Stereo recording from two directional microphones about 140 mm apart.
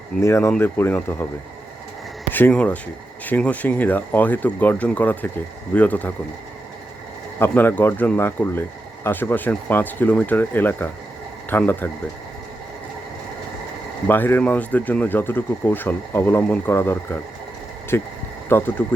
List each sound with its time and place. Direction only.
0.2 s speech: 20° left (ahead or behind)
2.3 s speech: 10° left (ahead or behind)
7.3 s speech: 15° left (ahead or behind)
14.1 s speech: 15° left (ahead or behind)